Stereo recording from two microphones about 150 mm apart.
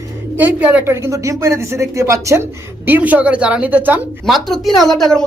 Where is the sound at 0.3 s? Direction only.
10° right (ahead or behind).